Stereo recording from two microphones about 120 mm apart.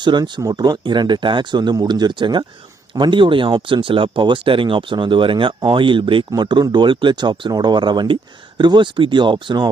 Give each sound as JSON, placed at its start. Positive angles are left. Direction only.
{"t": 0.0, "sound": "speech", "side_deg": -40}